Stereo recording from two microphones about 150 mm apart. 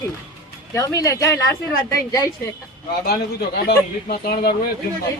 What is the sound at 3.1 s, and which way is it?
A man's voice, 90° left.